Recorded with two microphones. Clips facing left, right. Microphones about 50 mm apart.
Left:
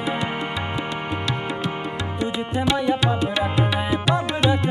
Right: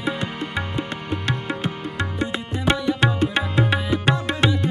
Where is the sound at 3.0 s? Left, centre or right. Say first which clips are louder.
Right 2 dB; right.